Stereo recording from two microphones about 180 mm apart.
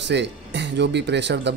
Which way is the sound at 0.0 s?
75° right (ahead or behind).